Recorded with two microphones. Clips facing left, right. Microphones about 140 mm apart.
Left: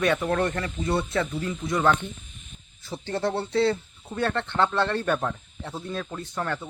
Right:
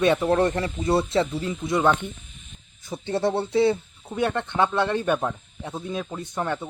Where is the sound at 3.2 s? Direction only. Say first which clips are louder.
Right 3 dB; 20° right (ahead or behind).